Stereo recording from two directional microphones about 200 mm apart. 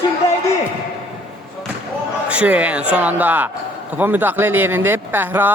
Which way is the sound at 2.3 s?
5° right (ahead or behind).